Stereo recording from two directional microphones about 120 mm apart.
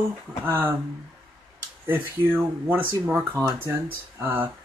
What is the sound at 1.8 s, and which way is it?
Speech, 15° right (ahead or behind).